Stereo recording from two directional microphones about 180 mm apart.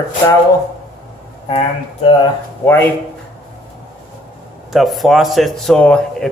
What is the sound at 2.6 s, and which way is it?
Speech, 10° left (ahead or behind).